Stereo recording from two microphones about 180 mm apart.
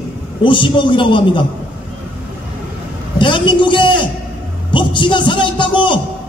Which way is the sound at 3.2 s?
25° left (ahead or behind).